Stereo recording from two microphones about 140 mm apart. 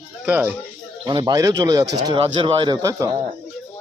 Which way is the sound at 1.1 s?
35° right (ahead or behind).